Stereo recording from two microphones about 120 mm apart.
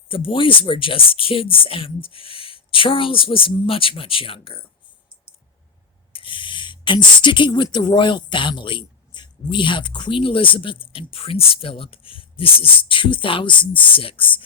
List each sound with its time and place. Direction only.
0.1 s speech: 50° left (ahead or behind)
6.1 s speech: 45° left (ahead or behind)